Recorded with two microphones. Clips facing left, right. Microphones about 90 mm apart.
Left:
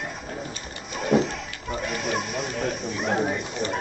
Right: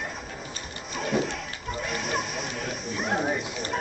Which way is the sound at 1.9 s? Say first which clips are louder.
Left 2 dB; centre (ahead or behind).